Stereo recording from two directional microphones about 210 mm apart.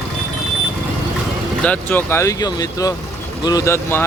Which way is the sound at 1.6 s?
10° left (ahead or behind).